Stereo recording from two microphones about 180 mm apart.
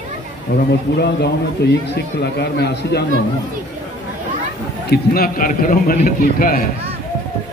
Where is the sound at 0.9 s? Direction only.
65° left (ahead or behind).